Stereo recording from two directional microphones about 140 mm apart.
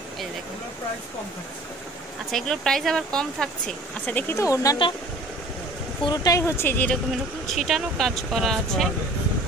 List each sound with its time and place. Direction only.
2.3 s speech: 5° left (ahead or behind); by 4.7 s 20° left (ahead or behind)
6.0 s speech: 25° left (ahead or behind)
7.4 s speech: centre (ahead or behind)